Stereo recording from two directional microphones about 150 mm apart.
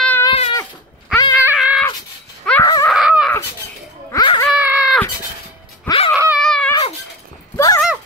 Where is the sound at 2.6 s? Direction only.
25° left (ahead or behind).